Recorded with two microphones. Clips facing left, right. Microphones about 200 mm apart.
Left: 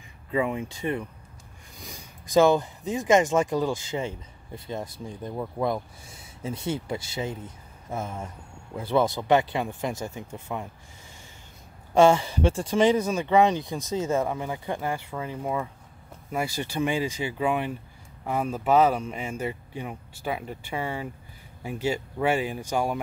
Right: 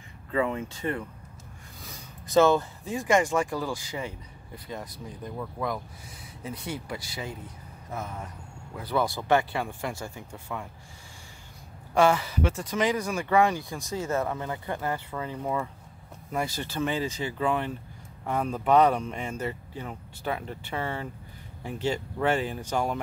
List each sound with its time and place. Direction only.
0.3 s speech: 15° left (ahead or behind)
11.9 s speech: 25° left (ahead or behind); by 22.9 s 10° left (ahead or behind)